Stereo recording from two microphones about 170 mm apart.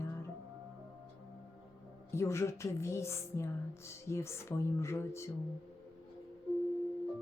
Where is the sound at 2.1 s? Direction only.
15° left (ahead or behind).